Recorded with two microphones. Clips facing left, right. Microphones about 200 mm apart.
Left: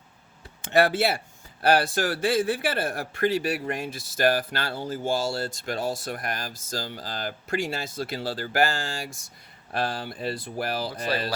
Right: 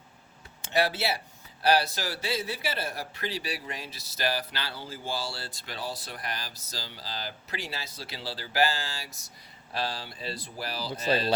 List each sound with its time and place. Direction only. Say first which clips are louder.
0.6 s speech: left 6 dB; 55° left (ahead or behind)
10.9 s speech: right 1 dB; 25° right (ahead or behind)